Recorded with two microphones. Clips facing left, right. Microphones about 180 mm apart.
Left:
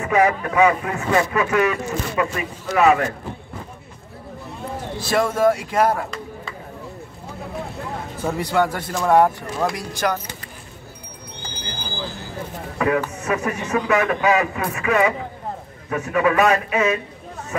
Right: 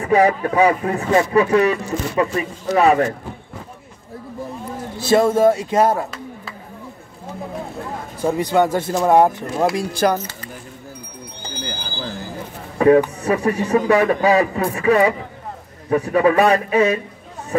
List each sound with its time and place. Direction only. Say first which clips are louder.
0.0 s speech: right 3 dB; 30° right (ahead or behind)
5.0 s speech: right 4 dB; 25° right (ahead or behind)
8.2 s speech: right 4 dB; 15° right (ahead or behind)
9.8 s speech: right 5 dB; 30° right (ahead or behind)
12.7 s a sound: right 8 dB; 35° right (ahead or behind)
13.2 s speech: right 5 dB; 35° right (ahead or behind)